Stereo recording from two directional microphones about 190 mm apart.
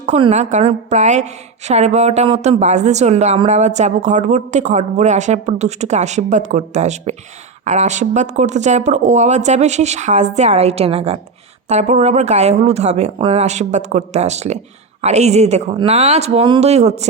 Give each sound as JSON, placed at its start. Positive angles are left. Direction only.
{"t": 0.0, "sound": "a woman's voice", "side_deg": -35}